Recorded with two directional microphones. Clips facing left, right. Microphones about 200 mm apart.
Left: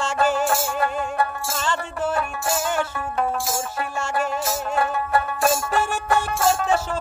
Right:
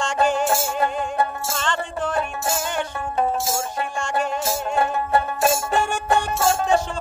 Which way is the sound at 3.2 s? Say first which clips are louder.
Right 2 dB; 25° right (ahead or behind).